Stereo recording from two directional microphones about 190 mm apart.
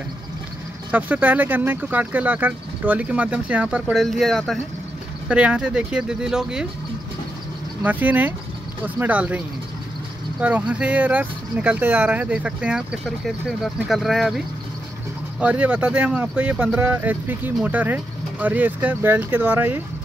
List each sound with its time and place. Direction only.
0.9 s speech: 10° right (ahead or behind)
7.8 s speech: 10° right (ahead or behind)
10.4 s speech: 10° right (ahead or behind)
15.4 s speech: 5° right (ahead or behind)